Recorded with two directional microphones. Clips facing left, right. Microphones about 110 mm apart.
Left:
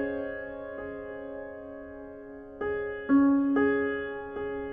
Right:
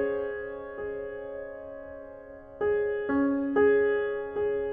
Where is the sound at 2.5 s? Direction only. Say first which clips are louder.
Right 6 dB; 20° left (ahead or behind).